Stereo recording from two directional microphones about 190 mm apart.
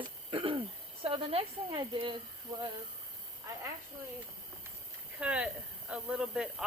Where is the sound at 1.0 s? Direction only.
30° right (ahead or behind).